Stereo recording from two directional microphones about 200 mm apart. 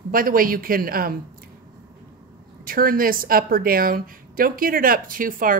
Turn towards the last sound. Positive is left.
turn(degrees=-45)  # may be behind; listen again after turning